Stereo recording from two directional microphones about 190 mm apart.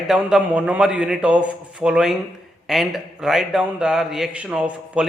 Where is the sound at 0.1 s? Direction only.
5° right (ahead or behind).